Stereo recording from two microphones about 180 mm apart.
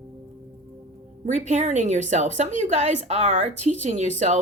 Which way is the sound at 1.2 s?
40° right (ahead or behind).